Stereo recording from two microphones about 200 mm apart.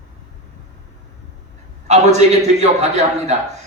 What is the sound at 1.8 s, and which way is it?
A man's voice, 35° right (ahead or behind).